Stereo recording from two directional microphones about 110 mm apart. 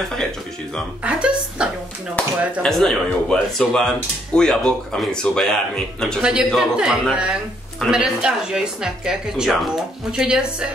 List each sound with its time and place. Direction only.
1.0 s speech: 10° right (ahead or behind)
2.6 s speech: 5° left (ahead or behind)
6.2 s speech: 5° right (ahead or behind)